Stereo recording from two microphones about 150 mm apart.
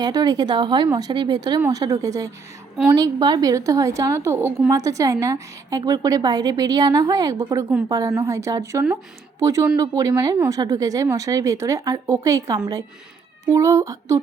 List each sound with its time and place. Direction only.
0.0 s a woman's voice: 25° right (ahead or behind)